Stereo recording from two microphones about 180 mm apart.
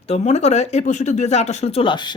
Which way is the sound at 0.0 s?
35° left (ahead or behind).